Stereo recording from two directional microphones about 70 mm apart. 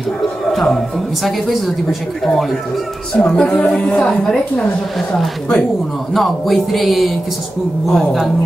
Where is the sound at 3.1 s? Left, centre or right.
Centre.